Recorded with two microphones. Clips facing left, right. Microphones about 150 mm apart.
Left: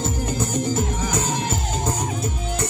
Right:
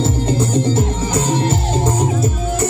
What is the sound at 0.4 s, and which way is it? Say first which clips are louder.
Music: right 5 dB; 10° left (ahead or behind).